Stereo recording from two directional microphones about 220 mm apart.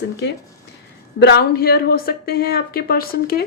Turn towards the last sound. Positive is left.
turn(degrees=45)  # may be behind; listen again after turning